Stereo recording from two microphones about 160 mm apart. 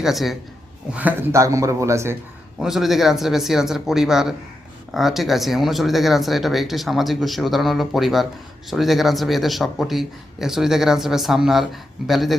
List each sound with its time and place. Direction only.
0.0 s a man's voice: centre (ahead or behind); by 2.1 s 20° right (ahead or behind)
2.6 s a man's voice: centre (ahead or behind)